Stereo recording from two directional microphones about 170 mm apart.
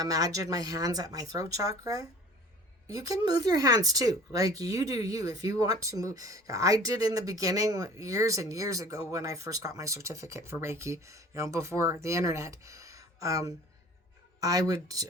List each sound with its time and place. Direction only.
0.0 s speech: 20° right (ahead or behind)